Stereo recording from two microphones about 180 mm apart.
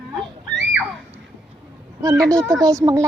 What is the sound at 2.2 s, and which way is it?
Speech, 15° right (ahead or behind).